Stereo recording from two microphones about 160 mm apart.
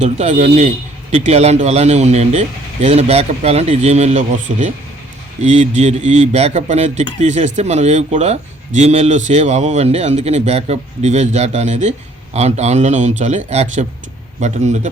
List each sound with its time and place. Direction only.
0.0 s a man's voice: 50° right (ahead or behind)